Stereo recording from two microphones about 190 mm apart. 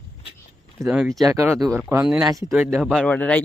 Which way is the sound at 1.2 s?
15° right (ahead or behind).